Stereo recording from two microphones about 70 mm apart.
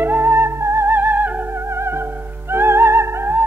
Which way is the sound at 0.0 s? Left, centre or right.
Right.